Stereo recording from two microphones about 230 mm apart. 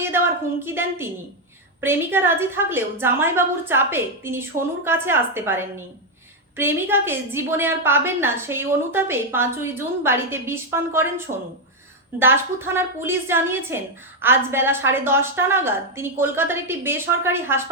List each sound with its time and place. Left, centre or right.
0.6 s a woman's voice: centre
11.3 s speech: right
12.2 s a woman's voice: centre